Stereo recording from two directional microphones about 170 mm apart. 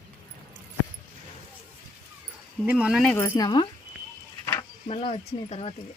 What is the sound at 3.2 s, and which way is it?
Speech, 20° left (ahead or behind).